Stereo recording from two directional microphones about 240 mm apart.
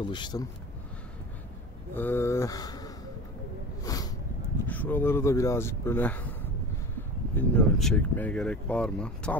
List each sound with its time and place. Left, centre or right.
0.1 s speech: centre
2.0 s speech: centre
3.8 s a sound: centre
4.6 s speech: centre
7.3 s speech: centre